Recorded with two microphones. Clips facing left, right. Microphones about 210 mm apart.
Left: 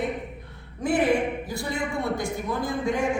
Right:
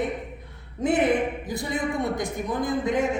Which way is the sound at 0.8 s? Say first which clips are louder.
Right 1 dB; 20° right (ahead or behind).